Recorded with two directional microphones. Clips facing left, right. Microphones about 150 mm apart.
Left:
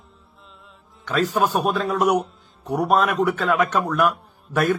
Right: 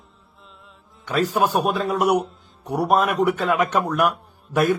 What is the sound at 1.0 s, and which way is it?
A man's voice, 10° right (ahead or behind).